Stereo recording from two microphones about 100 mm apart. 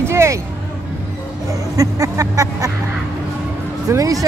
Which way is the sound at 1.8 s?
35° right (ahead or behind).